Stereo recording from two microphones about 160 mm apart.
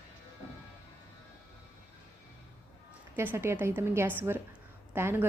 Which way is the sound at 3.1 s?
15° right (ahead or behind).